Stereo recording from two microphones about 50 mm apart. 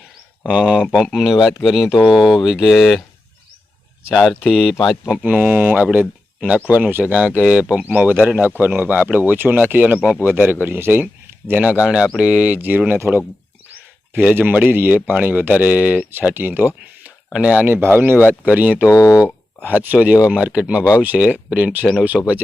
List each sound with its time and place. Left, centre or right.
0.4 s speech: centre
4.1 s speech: centre
5.2 s speech: right
10.7 s speech: right
11.5 s speech: right
12.1 s speech: right
14.2 s speech: right
16.3 s speech: right
17.3 s speech: right
17.7 s speech: right
18.2 s speech: right
18.9 s speech: left
19.8 s speech: right
22.1 s speech: centre